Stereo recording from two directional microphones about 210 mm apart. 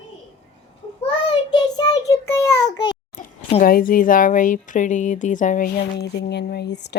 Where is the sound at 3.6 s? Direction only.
40° left (ahead or behind).